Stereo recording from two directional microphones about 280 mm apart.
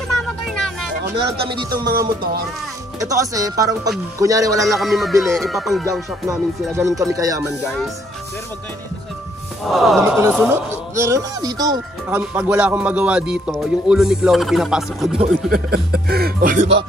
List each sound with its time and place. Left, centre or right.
0.5 s vehicle: centre
1.1 s speech: right
1.5 s speech: centre
4.7 s speech: centre
9.7 s speech: centre
15.5 s speech: right